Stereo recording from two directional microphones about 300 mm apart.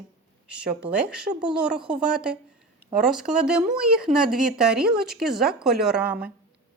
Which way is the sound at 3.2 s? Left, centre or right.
Centre.